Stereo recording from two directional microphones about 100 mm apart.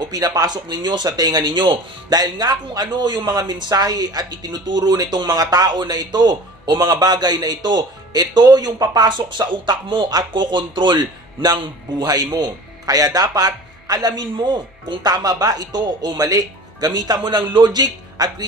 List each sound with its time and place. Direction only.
0.0 s speech: 40° right (ahead or behind)